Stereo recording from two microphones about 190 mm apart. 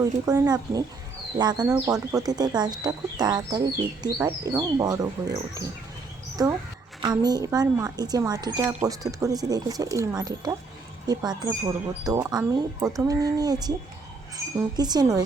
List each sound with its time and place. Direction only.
0.0 s speech: 20° right (ahead or behind)